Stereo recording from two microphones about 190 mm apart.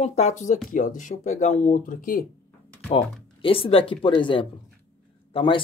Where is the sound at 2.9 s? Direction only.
30° left (ahead or behind).